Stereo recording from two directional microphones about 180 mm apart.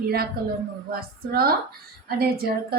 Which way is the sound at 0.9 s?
55° right (ahead or behind).